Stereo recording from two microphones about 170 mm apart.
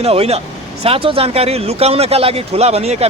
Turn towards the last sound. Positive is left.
turn(degrees=-40)  # may be behind; listen again after turning